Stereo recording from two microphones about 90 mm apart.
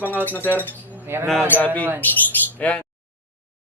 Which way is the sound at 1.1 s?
25° right (ahead or behind).